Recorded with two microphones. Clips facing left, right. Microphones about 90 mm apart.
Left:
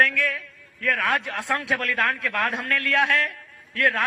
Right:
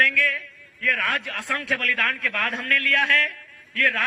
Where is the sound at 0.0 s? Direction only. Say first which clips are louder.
Even; 20° left (ahead or behind).